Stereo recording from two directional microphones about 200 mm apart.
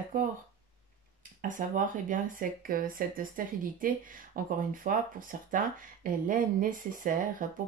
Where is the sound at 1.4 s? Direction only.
40° right (ahead or behind).